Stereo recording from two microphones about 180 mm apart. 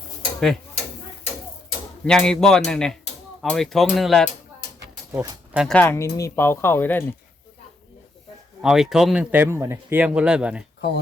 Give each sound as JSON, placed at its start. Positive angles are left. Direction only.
{"t": 0.3, "sound": "speech", "side_deg": 0}
{"t": 2.0, "sound": "speech", "side_deg": 5}
{"t": 5.1, "sound": "speech", "side_deg": -15}
{"t": 5.5, "sound": "speech", "side_deg": 5}
{"t": 8.6, "sound": "speech", "side_deg": 0}
{"t": 10.8, "sound": "speech", "side_deg": 65}